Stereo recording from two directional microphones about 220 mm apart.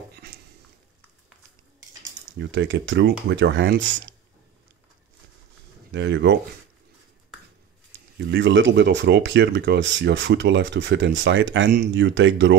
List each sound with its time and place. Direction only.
2.4 s speech: 55° right (ahead or behind)
5.9 s speech: 55° right (ahead or behind)
8.2 s speech: 55° right (ahead or behind)